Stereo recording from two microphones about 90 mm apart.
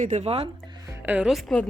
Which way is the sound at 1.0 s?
20° right (ahead or behind).